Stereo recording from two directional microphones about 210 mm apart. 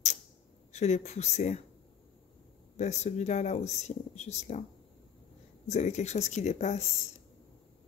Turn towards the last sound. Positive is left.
turn(degrees=35)  # may be behind; listen again after turning